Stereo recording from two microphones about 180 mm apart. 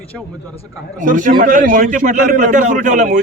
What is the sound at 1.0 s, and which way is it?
A man's voice, 45° right (ahead or behind).